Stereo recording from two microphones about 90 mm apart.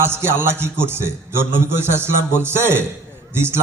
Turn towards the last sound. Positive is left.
turn(degrees=-30)  # may be behind; listen again after turning